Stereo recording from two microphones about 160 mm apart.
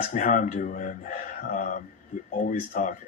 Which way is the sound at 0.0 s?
55° left (ahead or behind).